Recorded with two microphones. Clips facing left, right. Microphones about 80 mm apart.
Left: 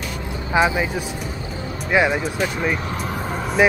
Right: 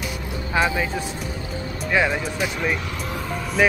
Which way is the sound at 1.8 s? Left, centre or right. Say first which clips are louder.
Left 3 dB; centre.